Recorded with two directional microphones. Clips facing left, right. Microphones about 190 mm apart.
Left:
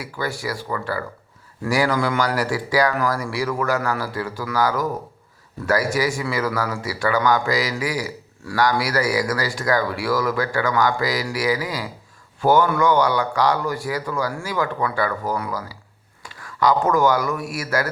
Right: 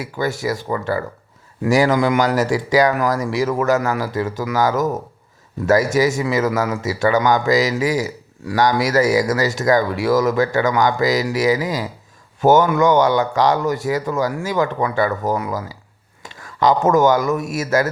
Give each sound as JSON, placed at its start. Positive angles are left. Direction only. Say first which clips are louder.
{"t": 0.0, "sound": "a man's voice", "louder": "right 5 dB", "side_deg": -20}